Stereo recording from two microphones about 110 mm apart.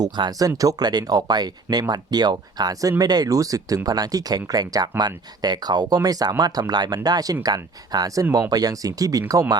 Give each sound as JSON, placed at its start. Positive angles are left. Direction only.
{"t": 0.0, "sound": "speech", "side_deg": -35}